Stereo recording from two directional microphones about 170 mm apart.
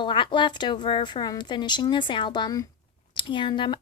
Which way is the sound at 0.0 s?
30° left (ahead or behind).